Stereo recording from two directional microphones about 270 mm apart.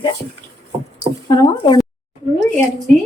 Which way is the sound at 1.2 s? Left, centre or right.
Centre.